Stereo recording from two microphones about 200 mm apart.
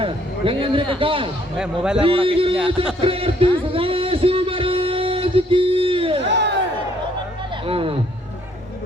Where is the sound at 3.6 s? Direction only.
25° right (ahead or behind).